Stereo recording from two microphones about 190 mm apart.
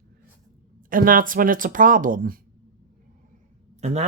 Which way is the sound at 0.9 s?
45° right (ahead or behind).